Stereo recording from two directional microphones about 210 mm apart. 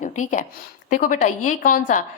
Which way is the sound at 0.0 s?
35° left (ahead or behind).